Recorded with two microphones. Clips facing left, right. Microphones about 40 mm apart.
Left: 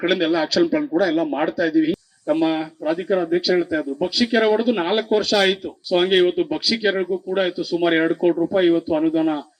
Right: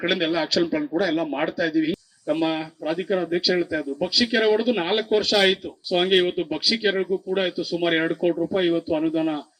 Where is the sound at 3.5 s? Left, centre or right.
Left.